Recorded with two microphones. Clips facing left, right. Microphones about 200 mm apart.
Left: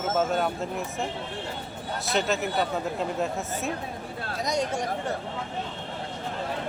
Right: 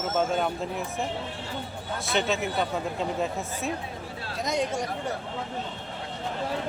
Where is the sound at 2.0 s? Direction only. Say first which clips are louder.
Even; centre (ahead or behind).